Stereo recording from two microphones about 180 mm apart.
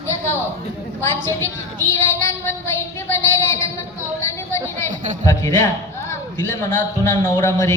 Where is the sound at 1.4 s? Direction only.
15° left (ahead or behind).